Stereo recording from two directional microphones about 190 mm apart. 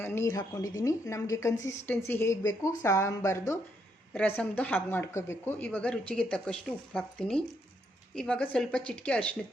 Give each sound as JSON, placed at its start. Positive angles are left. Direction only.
{"t": 0.0, "sound": "speech", "side_deg": 15}